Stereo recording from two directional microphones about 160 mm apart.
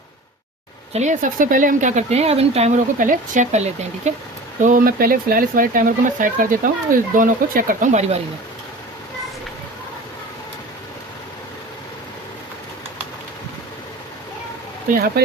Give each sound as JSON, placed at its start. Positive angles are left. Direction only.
{"t": 0.9, "sound": "speech", "side_deg": -50}
{"t": 4.6, "sound": "speech", "side_deg": -60}
{"t": 14.8, "sound": "speech", "side_deg": -70}